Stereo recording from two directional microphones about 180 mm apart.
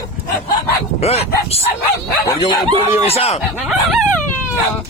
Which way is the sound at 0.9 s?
35° left (ahead or behind).